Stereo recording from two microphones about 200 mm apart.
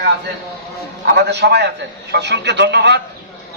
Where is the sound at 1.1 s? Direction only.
60° right (ahead or behind).